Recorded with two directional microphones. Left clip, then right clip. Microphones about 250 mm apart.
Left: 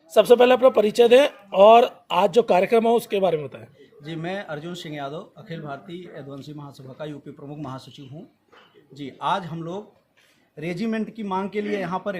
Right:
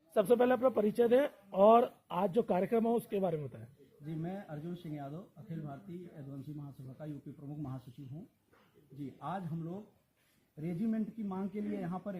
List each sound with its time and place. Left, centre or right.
0.1 s speech: centre
4.0 s speech: left
9.1 s speech: left